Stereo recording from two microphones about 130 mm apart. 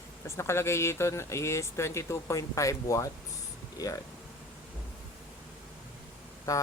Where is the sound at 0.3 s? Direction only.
20° left (ahead or behind).